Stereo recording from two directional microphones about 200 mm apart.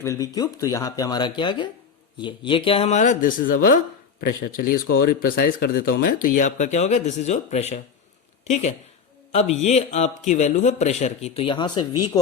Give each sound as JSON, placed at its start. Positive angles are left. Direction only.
{"t": 0.0, "sound": "speech", "side_deg": 15}